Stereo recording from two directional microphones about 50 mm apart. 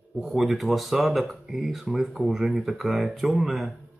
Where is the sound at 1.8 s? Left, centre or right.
Centre.